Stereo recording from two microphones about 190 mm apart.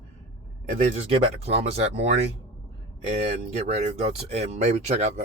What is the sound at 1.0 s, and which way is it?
Speech, 35° right (ahead or behind).